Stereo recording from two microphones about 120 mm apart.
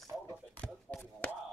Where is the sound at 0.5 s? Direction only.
10° left (ahead or behind).